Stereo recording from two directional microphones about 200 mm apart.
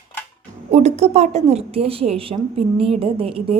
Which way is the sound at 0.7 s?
35° right (ahead or behind).